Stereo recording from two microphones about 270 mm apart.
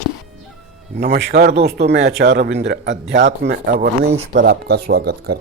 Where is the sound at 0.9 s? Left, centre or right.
Right.